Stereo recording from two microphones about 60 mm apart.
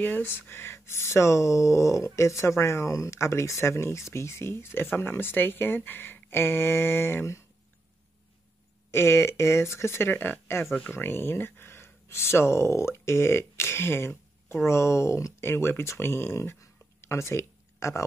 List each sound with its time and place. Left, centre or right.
0.0 s speech: left
8.9 s speech: left
15.4 s speech: left
16.5 s a sound: left